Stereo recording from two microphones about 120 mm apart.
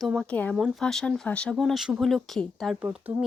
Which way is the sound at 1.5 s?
Centre (ahead or behind).